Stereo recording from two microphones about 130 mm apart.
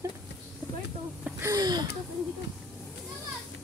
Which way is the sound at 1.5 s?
30° right (ahead or behind).